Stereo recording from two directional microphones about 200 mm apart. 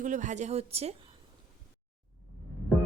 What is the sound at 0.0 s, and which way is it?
Speech, 40° right (ahead or behind).